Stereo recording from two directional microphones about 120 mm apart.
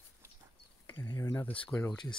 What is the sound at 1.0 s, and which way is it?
Speech, 25° left (ahead or behind).